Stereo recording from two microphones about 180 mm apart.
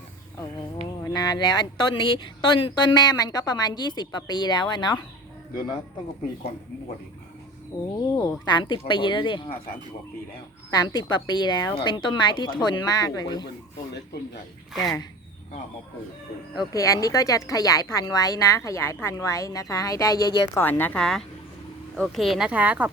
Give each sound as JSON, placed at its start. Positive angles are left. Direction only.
{"t": 1.0, "sound": "speech", "side_deg": 20}
{"t": 7.7, "sound": "a woman's voice", "side_deg": 15}
{"t": 10.7, "sound": "speech", "side_deg": 20}
{"t": 14.7, "sound": "speech", "side_deg": 0}
{"t": 16.6, "sound": "a woman's voice", "side_deg": 20}